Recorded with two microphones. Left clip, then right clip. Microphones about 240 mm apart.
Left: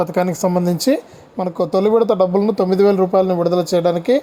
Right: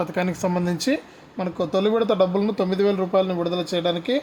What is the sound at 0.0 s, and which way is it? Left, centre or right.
Speech, left.